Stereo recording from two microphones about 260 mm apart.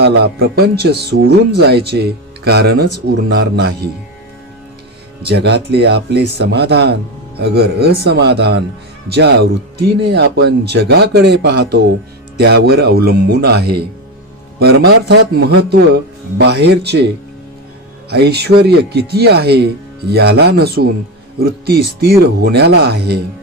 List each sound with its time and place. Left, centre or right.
0.0 s a man's voice: right
5.2 s a man's voice: right
18.1 s a man's voice: right